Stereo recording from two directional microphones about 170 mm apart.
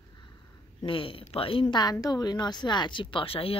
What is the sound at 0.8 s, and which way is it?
A woman's voice, 30° left (ahead or behind).